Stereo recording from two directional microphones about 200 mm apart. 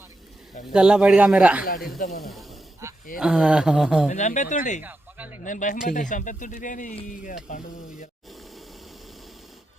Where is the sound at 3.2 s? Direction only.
5° right (ahead or behind).